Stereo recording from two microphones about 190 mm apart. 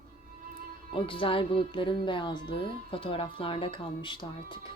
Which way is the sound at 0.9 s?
30° left (ahead or behind).